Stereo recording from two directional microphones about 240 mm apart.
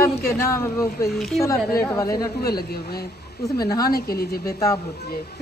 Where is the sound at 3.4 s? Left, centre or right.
Centre.